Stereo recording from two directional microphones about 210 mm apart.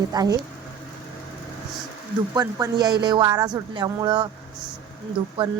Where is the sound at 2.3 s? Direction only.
20° right (ahead or behind).